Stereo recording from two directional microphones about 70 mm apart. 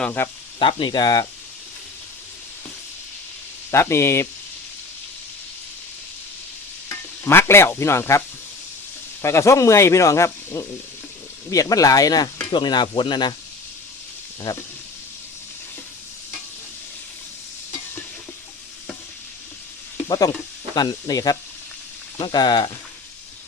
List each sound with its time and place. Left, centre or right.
0.2 s speech: left
0.8 s speech: left
3.7 s speech: left
7.3 s speech: left
9.2 s speech: left
11.5 s speech: left
12.5 s speech: left
14.5 s speech: left
20.1 s speech: left
22.2 s speech: left